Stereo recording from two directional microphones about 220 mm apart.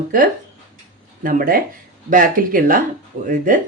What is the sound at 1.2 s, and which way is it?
A woman's voice, 40° right (ahead or behind).